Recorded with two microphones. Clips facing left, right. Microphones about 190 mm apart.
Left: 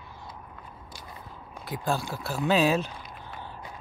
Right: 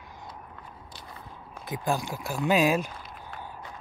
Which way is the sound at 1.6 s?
20° right (ahead or behind).